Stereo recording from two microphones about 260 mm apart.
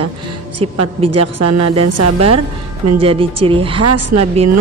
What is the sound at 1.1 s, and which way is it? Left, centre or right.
A woman's voice, right.